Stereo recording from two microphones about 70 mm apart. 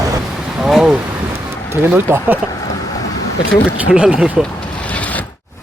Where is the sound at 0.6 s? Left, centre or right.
Centre.